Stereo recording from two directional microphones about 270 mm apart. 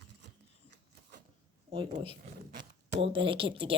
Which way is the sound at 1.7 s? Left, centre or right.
Centre.